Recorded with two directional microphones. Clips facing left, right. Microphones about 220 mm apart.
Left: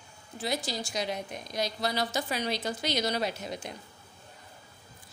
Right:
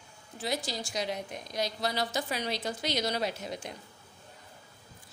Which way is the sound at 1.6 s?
25° right (ahead or behind).